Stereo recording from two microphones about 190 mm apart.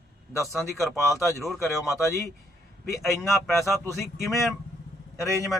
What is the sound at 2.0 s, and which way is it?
Speech, 15° left (ahead or behind).